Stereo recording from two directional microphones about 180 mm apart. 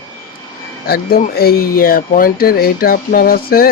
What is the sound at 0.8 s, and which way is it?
Speech, 55° left (ahead or behind).